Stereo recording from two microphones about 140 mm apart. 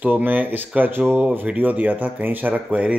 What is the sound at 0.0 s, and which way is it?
Speech, 15° right (ahead or behind).